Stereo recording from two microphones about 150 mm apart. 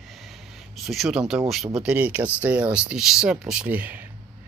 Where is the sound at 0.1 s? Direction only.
Centre (ahead or behind).